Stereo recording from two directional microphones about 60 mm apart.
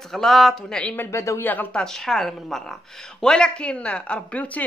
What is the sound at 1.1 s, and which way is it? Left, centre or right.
Speech, left.